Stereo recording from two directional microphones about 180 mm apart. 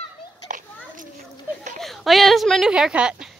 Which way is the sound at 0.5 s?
45° right (ahead or behind).